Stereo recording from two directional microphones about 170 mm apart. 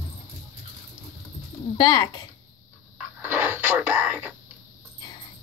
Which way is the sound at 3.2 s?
10° right (ahead or behind).